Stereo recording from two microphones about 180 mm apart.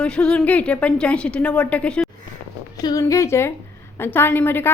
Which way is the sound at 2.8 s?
20° left (ahead or behind).